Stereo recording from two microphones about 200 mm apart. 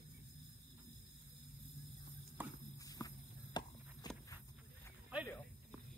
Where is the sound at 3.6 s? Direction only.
20° left (ahead or behind).